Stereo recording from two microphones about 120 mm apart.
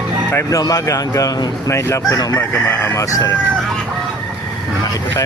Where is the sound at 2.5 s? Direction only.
15° left (ahead or behind).